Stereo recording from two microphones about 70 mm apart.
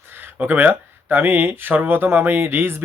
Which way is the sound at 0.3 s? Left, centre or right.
Right.